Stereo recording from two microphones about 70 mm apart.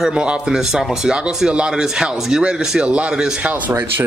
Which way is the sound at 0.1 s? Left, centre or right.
Centre.